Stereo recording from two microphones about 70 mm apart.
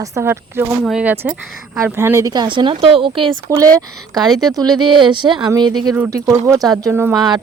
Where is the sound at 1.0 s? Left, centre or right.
Centre.